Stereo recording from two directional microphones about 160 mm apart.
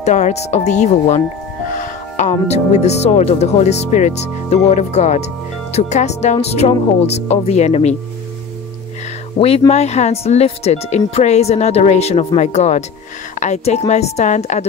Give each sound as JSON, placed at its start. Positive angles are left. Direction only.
{"t": 0.0, "sound": "speech", "side_deg": 45}
{"t": 9.4, "sound": "speech", "side_deg": 40}